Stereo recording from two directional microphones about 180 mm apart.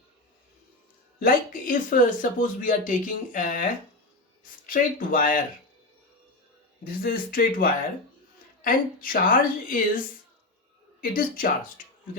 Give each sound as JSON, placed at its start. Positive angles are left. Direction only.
{"t": 1.2, "sound": "speech", "side_deg": 50}
{"t": 6.8, "sound": "speech", "side_deg": 55}
{"t": 11.0, "sound": "speech", "side_deg": 55}